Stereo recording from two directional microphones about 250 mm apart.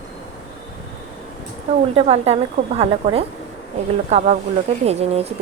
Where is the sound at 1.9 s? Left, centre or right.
Right.